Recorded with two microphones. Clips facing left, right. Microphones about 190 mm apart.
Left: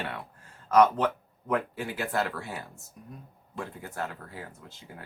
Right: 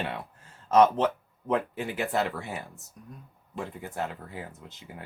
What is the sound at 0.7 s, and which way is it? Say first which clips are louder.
Speech: right 1 dB; 25° right (ahead or behind).